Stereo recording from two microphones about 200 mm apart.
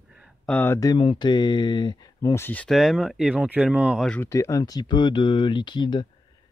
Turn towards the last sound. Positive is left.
turn(degrees=20)  # may be behind; listen again after turning